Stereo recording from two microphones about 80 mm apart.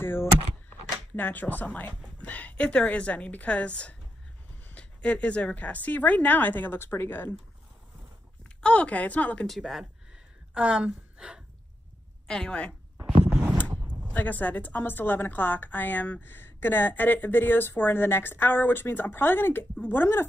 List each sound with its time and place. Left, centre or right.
0.0 s a sound: left
1.1 s a woman's voice: left
8.5 s a woman's voice: centre
9.6 s a woman's voice: centre
12.3 s a woman's voice: centre
14.1 s a woman's voice: left